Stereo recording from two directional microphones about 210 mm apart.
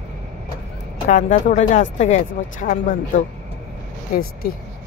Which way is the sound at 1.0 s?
35° left (ahead or behind).